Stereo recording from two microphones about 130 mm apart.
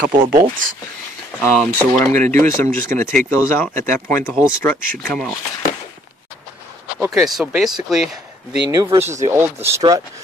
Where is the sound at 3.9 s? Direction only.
15° left (ahead or behind).